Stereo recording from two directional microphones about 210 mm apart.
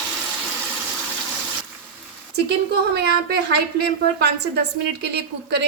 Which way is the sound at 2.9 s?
50° right (ahead or behind).